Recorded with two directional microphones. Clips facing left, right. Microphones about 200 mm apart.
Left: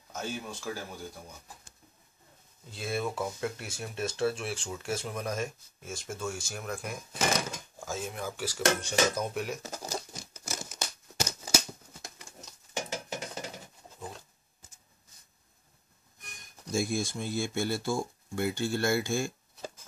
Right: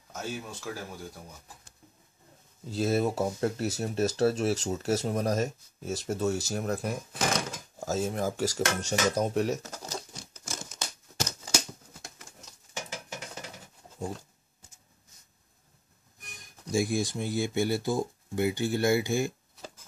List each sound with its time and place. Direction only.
0.1 s speech: 5° right (ahead or behind)
2.7 s speech: 40° right (ahead or behind)
7.1 s speech: 5° left (ahead or behind)
7.8 s speech: 40° right (ahead or behind)
9.6 s crumpling: 10° left (ahead or behind)
12.7 s a sound: 30° left (ahead or behind)
16.7 s speech: 15° right (ahead or behind)